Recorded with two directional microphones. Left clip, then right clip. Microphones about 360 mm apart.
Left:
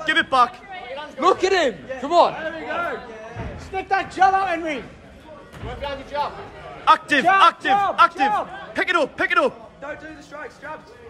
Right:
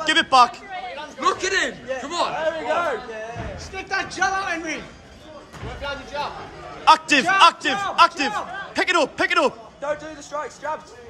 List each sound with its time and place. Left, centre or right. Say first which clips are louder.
0.0 s a man's voice: right 2 dB; centre
0.9 s a man's voice: left 4 dB; centre
2.4 s a man's voice: right 4 dB; right
3.7 s a man's voice: left 4 dB; centre
6.8 s a man's voice: right 1 dB; centre
9.8 s a man's voice: right 6 dB; right